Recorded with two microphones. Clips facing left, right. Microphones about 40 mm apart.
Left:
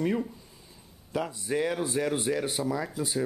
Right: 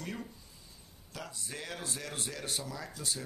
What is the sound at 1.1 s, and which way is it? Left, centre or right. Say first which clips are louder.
Speech: left 14 dB; left.